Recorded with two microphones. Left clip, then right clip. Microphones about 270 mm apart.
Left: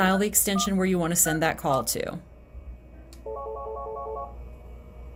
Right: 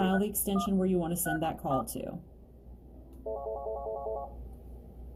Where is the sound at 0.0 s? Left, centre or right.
Left.